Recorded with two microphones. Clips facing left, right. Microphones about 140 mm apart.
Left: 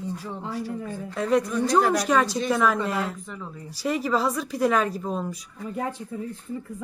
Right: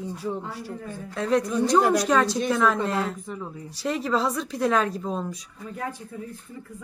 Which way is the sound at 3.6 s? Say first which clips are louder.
Left 1 dB; 5° left (ahead or behind).